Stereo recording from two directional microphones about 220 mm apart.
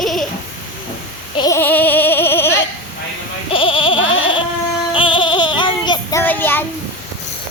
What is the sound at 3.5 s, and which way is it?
Bleat, 25° left (ahead or behind).